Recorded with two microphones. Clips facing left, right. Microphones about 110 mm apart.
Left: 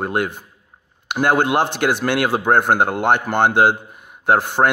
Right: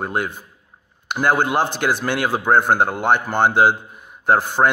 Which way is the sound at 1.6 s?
60° left (ahead or behind).